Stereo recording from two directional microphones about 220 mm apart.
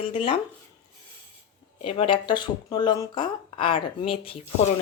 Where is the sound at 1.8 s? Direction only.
25° left (ahead or behind).